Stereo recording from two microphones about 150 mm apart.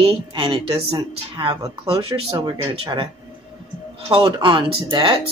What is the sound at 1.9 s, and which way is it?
Speech, 40° right (ahead or behind).